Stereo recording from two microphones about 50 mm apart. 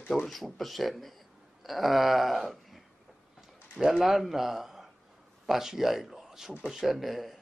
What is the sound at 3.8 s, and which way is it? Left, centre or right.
Speech, centre.